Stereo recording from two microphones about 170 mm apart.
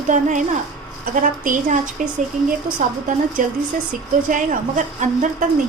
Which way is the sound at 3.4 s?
50° right (ahead or behind).